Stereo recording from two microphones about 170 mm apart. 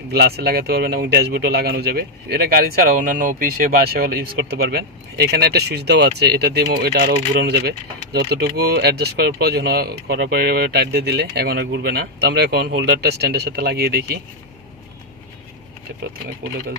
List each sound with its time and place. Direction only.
0.1 s speech: 70° right (ahead or behind)